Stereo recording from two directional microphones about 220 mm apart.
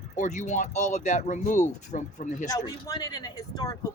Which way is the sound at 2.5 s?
15° left (ahead or behind).